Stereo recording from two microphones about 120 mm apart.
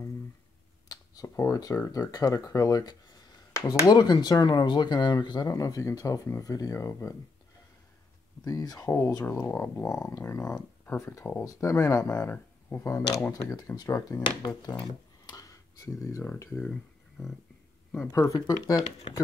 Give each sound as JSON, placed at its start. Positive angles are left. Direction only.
{"t": 0.8, "sound": "speech", "side_deg": 30}
{"t": 8.5, "sound": "speech", "side_deg": 30}
{"t": 18.1, "sound": "speech", "side_deg": 25}